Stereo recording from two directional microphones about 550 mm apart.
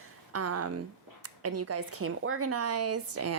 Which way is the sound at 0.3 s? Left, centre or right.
Right.